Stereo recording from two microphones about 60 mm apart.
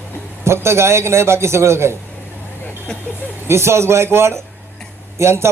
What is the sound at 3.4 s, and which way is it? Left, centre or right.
A man's voice, right.